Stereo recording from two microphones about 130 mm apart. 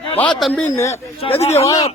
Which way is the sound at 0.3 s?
Centre (ahead or behind).